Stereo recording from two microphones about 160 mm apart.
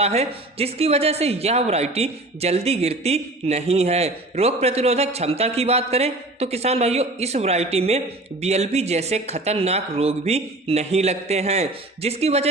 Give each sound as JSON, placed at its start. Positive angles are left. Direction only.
{"t": 0.0, "sound": "speech", "side_deg": -40}